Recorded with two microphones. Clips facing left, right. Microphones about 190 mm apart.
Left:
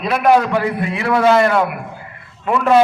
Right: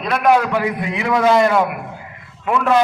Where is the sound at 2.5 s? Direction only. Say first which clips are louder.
Left 3 dB; 5° left (ahead or behind).